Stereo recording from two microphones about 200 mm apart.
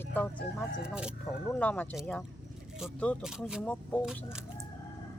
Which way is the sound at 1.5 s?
5° left (ahead or behind).